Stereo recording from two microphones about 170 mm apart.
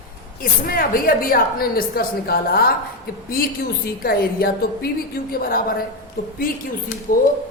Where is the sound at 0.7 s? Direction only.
60° left (ahead or behind).